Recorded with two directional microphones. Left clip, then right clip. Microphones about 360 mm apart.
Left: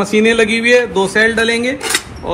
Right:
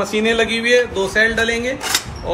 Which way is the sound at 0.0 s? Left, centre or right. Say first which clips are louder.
Left 5 dB; centre.